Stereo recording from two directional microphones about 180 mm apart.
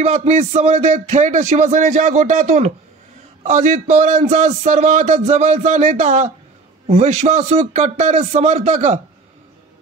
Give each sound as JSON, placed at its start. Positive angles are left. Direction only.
{"t": 0.0, "sound": "speech", "side_deg": -40}